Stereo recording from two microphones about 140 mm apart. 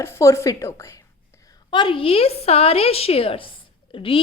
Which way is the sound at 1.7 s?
35° left (ahead or behind).